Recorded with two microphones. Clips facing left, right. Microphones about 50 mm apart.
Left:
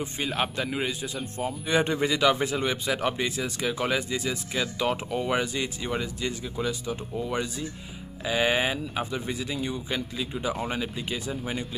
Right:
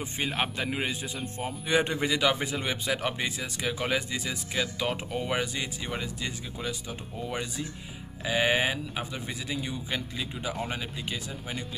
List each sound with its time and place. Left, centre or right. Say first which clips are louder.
0.0 s a man's voice: left 2 dB; right
1.7 s speech: left 1 dB; centre